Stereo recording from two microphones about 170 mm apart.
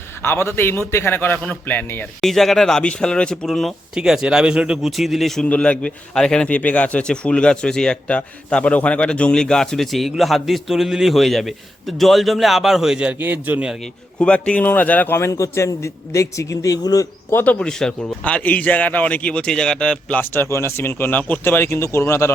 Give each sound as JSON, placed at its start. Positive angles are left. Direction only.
{"t": 0.2, "sound": "a man's voice", "side_deg": 15}
{"t": 14.2, "sound": "a man's voice", "side_deg": 5}
{"t": 17.4, "sound": "a man's voice", "side_deg": 5}